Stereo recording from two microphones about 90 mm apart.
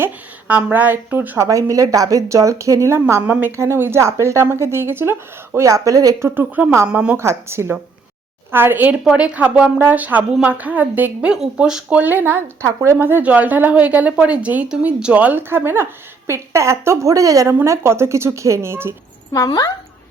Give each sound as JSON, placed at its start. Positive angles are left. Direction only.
{"t": 0.0, "sound": "speech", "side_deg": -20}
{"t": 1.4, "sound": "a woman's voice", "side_deg": -35}
{"t": 6.1, "sound": "speech", "side_deg": -25}
{"t": 6.8, "sound": "a woman's voice", "side_deg": -10}
{"t": 7.2, "sound": "a woman's voice", "side_deg": -30}
{"t": 17.5, "sound": "speech", "side_deg": -25}